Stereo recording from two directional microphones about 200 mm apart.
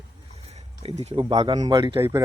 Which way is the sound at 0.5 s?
30° right (ahead or behind).